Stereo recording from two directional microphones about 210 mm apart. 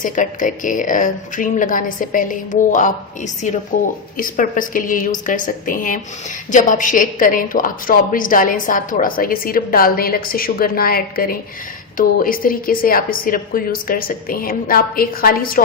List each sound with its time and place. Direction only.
0.0 s a woman's voice: 40° left (ahead or behind)